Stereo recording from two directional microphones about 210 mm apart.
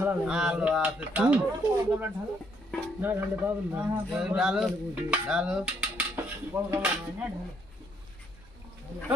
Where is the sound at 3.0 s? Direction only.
10° right (ahead or behind).